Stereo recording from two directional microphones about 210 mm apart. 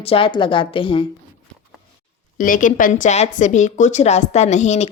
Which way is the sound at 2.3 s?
40° left (ahead or behind).